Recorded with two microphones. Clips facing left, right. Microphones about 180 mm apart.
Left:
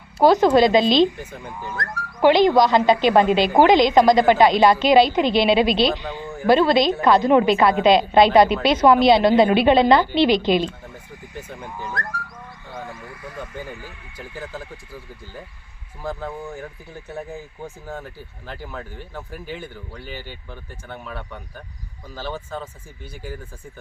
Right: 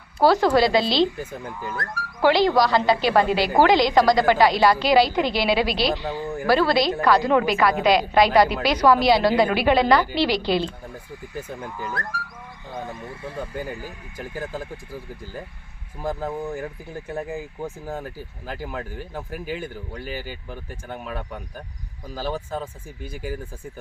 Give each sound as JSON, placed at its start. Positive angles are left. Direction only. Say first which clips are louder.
{"t": 0.2, "sound": "speech", "louder": "left 3 dB", "side_deg": 20}
{"t": 1.6, "sound": "speech", "louder": "left 2 dB", "side_deg": -5}
{"t": 2.2, "sound": "speech", "louder": "left 3 dB", "side_deg": 20}
{"t": 12.0, "sound": "speech", "louder": "left 1 dB", "side_deg": -10}
{"t": 12.7, "sound": "speech", "louder": "right 2 dB", "side_deg": -20}
{"t": 13.7, "sound": "speech", "louder": "right 3 dB", "side_deg": -45}
{"t": 18.4, "sound": "speech", "louder": "right 3 dB", "side_deg": -10}